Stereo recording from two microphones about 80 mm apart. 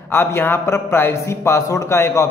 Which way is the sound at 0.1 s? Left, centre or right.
Left.